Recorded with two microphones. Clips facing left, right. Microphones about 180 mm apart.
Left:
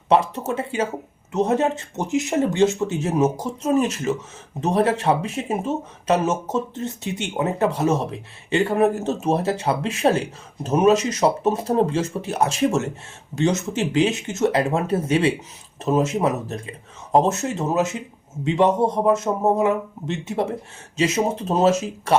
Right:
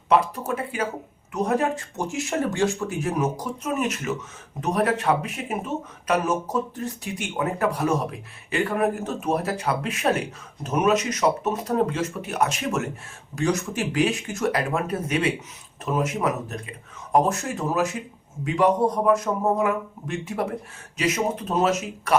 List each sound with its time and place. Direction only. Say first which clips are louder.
0.1 s speech: left 2 dB; 25° left (ahead or behind)